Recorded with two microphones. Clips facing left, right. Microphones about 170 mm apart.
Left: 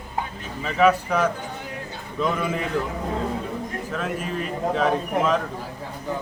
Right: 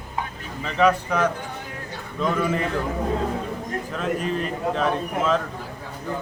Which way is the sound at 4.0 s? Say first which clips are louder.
Right 5 dB; 5° left (ahead or behind).